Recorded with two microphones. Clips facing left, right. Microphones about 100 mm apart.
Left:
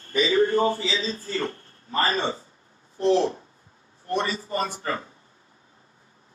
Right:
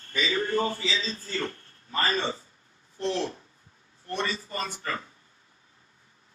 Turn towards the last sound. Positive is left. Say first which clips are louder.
# left 5 dB
turn(degrees=30)  # may be behind; listen again after turning